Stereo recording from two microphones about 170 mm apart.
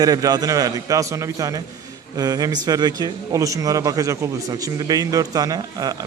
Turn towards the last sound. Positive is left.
turn(degrees=-25)  # may be behind; listen again after turning